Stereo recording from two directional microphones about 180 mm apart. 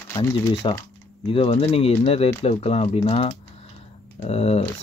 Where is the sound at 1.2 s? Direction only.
30° left (ahead or behind).